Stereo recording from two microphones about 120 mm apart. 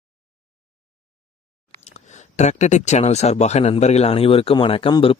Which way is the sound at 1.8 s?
70° left (ahead or behind).